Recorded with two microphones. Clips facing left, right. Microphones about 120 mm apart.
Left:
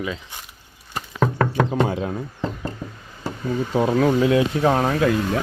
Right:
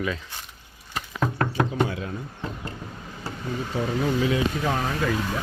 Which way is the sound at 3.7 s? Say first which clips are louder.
Left 8 dB; 85° left.